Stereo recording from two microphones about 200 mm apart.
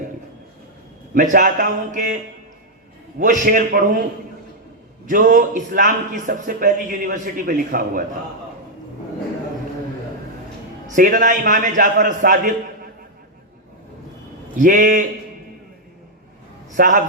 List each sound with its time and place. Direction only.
1.1 s a man's voice: 40° right (ahead or behind)
3.2 s a man's voice: 40° right (ahead or behind)
5.0 s a man's voice: 40° right (ahead or behind)
10.8 s music: 40° right (ahead or behind)
11.2 s a man's voice: 40° right (ahead or behind)
14.5 s a man's voice: 40° right (ahead or behind)
16.7 s speech: 40° right (ahead or behind)